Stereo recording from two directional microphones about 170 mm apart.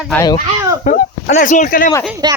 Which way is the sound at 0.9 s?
50° left (ahead or behind).